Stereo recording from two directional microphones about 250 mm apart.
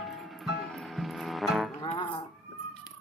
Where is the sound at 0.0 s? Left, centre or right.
Centre.